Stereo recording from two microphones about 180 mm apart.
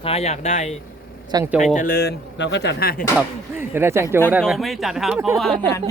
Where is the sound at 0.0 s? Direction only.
35° left (ahead or behind); by 2.9 s 70° left (ahead or behind).